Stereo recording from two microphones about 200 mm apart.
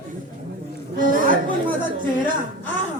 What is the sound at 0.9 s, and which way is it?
Music, 45° right (ahead or behind).